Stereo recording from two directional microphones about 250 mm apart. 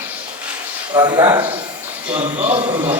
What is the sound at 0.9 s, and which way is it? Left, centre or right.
A man's voice, centre.